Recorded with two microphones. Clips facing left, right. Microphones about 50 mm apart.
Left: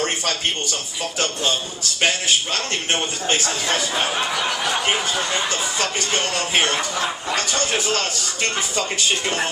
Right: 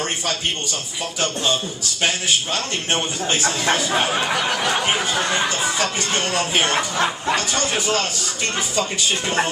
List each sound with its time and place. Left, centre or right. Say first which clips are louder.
3.4 s speech: right 3 dB; right
4.2 s a sound: right 1 dB; centre
4.6 s speech: right 1 dB; right
5.4 s speech: right 2 dB; right